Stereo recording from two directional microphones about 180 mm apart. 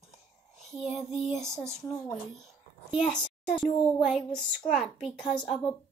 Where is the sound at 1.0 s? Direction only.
Centre (ahead or behind).